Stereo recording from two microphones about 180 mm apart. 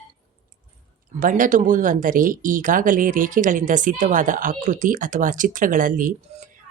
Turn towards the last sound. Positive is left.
turn(degrees=-45)  # may be behind; listen again after turning